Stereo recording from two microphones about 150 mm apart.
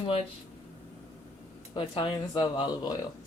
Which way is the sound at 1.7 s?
30° left (ahead or behind).